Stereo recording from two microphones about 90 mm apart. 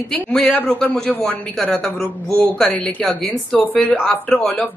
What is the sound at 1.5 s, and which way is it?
Speech, 5° left (ahead or behind).